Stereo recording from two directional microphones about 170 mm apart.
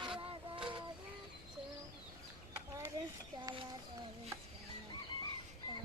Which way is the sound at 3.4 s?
30° right (ahead or behind).